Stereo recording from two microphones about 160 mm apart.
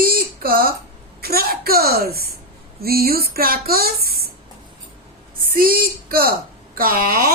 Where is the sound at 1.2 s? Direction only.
70° right (ahead or behind).